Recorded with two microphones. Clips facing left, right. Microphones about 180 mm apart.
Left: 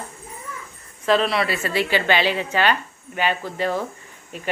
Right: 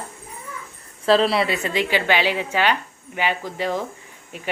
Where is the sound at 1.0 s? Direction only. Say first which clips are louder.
Right 2 dB; 30° right (ahead or behind).